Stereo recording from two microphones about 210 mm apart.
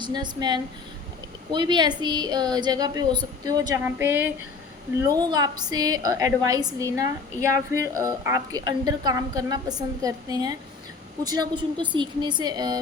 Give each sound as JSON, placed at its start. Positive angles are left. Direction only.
{"t": 0.0, "sound": "a woman's voice", "side_deg": -20}